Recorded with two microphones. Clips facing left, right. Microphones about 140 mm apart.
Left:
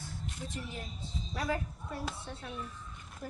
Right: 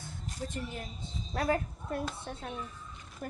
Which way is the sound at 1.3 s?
55° right (ahead or behind).